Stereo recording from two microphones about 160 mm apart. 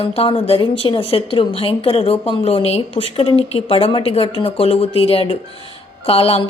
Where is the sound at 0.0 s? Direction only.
35° left (ahead or behind).